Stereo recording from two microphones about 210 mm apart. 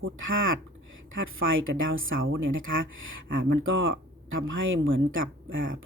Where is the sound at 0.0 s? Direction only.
70° right (ahead or behind).